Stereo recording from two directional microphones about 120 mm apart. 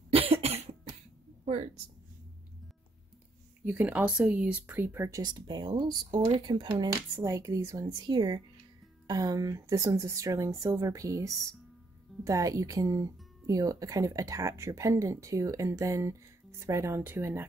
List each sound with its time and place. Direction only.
0.1 s cough: 55° right (ahead or behind)
3.6 s speech: 10° right (ahead or behind)
5.2 s speech: 35° right (ahead or behind); by 17.5 s 15° right (ahead or behind)